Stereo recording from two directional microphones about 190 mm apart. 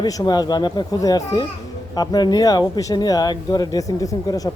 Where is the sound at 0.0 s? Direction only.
20° left (ahead or behind).